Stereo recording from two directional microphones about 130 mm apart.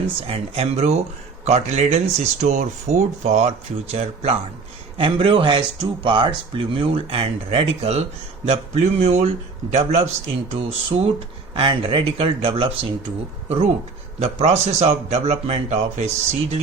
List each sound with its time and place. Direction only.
0.2 s speech: 50° right (ahead or behind)
4.9 s speech: 40° right (ahead or behind)
14.2 s speech: 55° right (ahead or behind)